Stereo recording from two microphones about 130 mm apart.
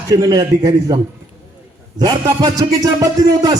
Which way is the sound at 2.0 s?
30° right (ahead or behind).